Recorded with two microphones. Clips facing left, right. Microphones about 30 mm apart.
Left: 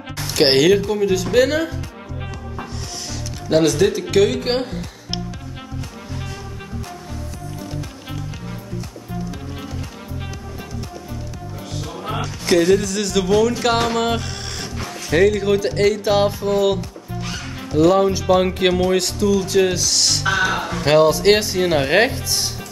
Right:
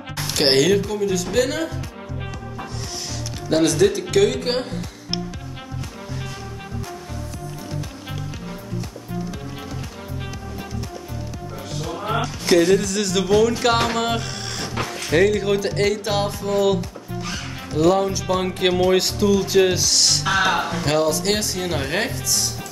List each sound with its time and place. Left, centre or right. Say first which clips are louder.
0.4 s speech: left 3 dB; centre
11.8 s speech: right 3 dB; centre
18.9 s speech: even; centre
20.4 s a sound: right 1 dB; centre
20.8 s speech: left 10 dB; left